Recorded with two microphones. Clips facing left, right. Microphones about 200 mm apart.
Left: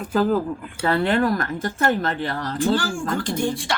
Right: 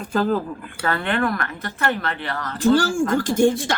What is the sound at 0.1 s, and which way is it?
Speech, 10° left (ahead or behind).